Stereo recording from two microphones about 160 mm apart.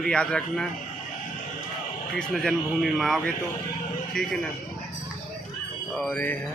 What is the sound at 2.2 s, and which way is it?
Speech, centre (ahead or behind).